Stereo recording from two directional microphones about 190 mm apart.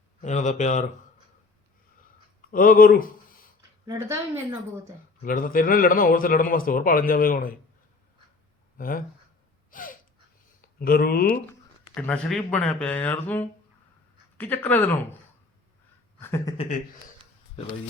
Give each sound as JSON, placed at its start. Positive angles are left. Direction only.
{"t": 0.2, "sound": "speech", "side_deg": 40}
{"t": 2.5, "sound": "speech", "side_deg": 50}
{"t": 3.8, "sound": "a woman's voice", "side_deg": -15}
{"t": 5.2, "sound": "a man's voice", "side_deg": 45}
{"t": 8.8, "sound": "a man's voice", "side_deg": 45}
{"t": 9.7, "sound": "a sound", "side_deg": 45}
{"t": 10.8, "sound": "a man's voice", "side_deg": 50}
{"t": 11.9, "sound": "speech", "side_deg": 5}
{"t": 16.2, "sound": "speech", "side_deg": 15}
{"t": 16.6, "sound": "speech", "side_deg": 40}